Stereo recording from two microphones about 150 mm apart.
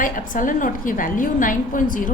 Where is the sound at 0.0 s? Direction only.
65° left (ahead or behind).